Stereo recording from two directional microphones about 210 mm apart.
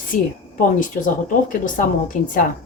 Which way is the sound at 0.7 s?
40° left (ahead or behind).